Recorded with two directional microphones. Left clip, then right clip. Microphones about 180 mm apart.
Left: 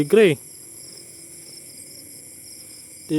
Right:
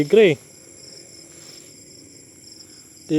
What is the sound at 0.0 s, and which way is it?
Speech, 20° left (ahead or behind).